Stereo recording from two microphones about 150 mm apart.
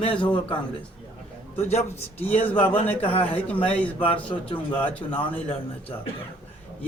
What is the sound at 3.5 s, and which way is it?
Speech, 10° left (ahead or behind).